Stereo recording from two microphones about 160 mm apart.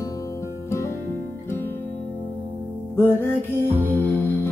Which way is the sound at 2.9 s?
15° left (ahead or behind).